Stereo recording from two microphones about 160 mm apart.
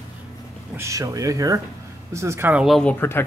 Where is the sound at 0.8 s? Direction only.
20° right (ahead or behind); by 2.9 s centre (ahead or behind).